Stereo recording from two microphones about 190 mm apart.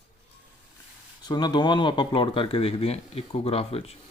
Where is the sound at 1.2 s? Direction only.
20° left (ahead or behind).